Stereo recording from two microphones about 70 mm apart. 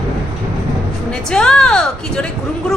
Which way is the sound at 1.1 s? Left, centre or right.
Centre.